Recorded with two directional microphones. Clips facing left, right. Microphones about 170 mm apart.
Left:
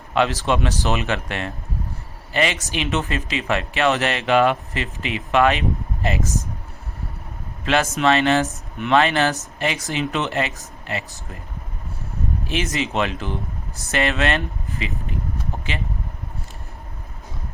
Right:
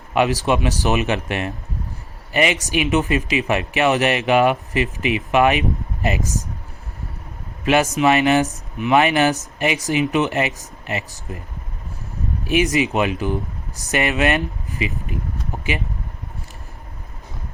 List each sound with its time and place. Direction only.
0.1 s speech: 15° right (ahead or behind)
7.6 s speech: 15° right (ahead or behind)
8.4 s speech: centre (ahead or behind)
8.9 s speech: 15° right (ahead or behind)
12.5 s speech: 15° right (ahead or behind)